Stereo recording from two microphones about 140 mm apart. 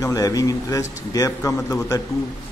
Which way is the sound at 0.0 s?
25° left (ahead or behind).